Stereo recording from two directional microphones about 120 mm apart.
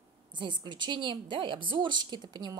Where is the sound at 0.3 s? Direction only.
40° right (ahead or behind).